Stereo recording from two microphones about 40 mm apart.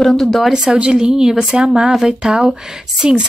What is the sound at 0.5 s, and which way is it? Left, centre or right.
Speech, right.